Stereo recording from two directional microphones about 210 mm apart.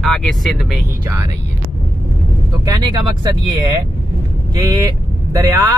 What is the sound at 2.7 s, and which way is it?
Speech, 20° right (ahead or behind).